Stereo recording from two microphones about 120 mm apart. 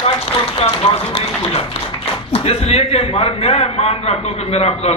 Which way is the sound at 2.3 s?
55° left (ahead or behind).